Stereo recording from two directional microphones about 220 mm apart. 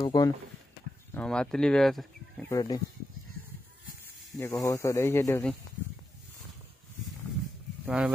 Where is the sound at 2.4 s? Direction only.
15° left (ahead or behind).